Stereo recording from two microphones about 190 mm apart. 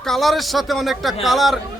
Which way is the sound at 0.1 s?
Centre (ahead or behind).